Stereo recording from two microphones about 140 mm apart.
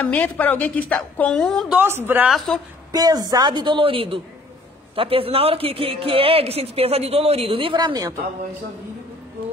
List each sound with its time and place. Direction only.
0.0 s a woman's voice: 10° left (ahead or behind)
1.8 s speech: 15° right (ahead or behind)
2.3 s a woman's voice: 5° left (ahead or behind)
2.9 s a woman's voice: 25° right (ahead or behind)